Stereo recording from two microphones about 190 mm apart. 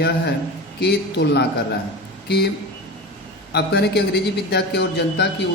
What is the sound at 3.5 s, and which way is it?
A man's voice, 60° left (ahead or behind).